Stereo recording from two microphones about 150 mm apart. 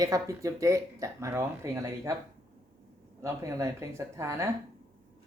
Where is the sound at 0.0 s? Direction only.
20° right (ahead or behind).